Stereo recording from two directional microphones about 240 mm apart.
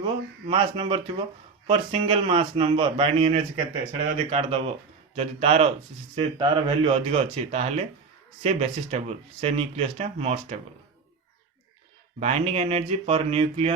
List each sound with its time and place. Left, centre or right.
0.0 s speech: right
12.2 s speech: right